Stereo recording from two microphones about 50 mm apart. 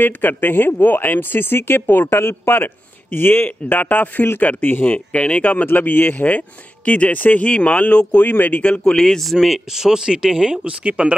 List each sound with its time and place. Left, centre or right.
0.0 s speech: left
4.9 s speech: left
8.2 s speech: left
9.0 s speech: centre
10.6 s speech: right